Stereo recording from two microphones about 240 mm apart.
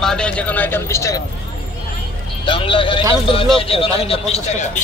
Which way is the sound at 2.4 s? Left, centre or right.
Left.